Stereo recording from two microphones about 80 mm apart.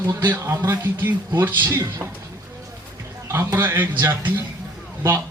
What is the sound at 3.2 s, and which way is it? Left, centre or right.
Speech, right.